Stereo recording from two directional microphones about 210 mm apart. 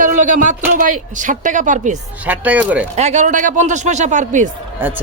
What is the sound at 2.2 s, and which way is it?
Speech, 10° right (ahead or behind).